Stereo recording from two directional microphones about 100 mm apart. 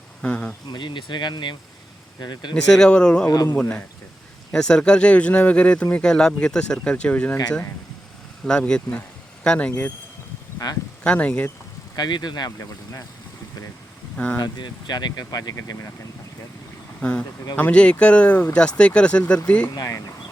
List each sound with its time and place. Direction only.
0.2 s speech: 15° left (ahead or behind)
0.7 s speech: 50° left (ahead or behind)
2.6 s speech: 5° left (ahead or behind)
3.2 s speech: 40° left (ahead or behind)
3.6 s speech: 10° left (ahead or behind)
8.4 s speech: 10° left (ahead or behind)
11.0 s speech: 10° left (ahead or behind)
11.9 s speech: 45° left (ahead or behind)
14.3 s speech: 45° left (ahead or behind)
17.0 s speech: 10° left (ahead or behind)
19.7 s speech: 35° left (ahead or behind)